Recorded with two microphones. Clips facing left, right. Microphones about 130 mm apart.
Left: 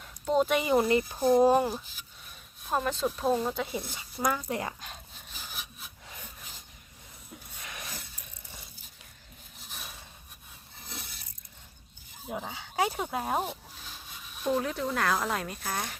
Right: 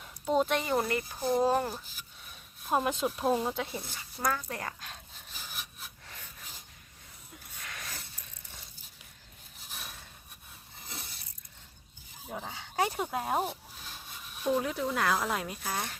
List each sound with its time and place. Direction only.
0.0 s a sound: centre (ahead or behind)
0.6 s speech: 10° left (ahead or behind)
2.6 s speech: 15° right (ahead or behind)
3.6 s speech: 5° left (ahead or behind)
4.4 s speech: 20° left (ahead or behind)
5.3 s wood: centre (ahead or behind)
7.6 s a sound: 20° left (ahead or behind)
12.3 s speech: 5° left (ahead or behind)